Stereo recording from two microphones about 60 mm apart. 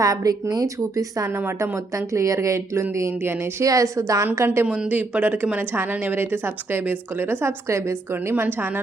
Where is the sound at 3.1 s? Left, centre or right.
Right.